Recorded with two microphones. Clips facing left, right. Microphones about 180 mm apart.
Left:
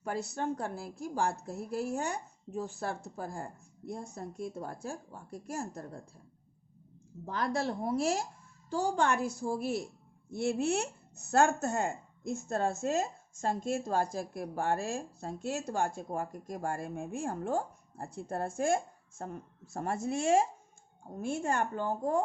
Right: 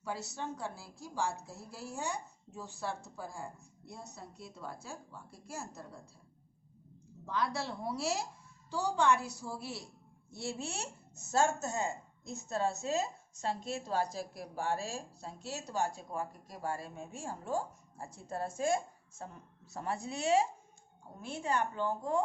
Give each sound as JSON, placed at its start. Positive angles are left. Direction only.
{"t": 0.0, "sound": "a woman's voice", "side_deg": 55}
{"t": 7.3, "sound": "speech", "side_deg": 50}